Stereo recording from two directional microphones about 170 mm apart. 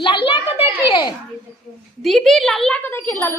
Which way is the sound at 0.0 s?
30° left (ahead or behind).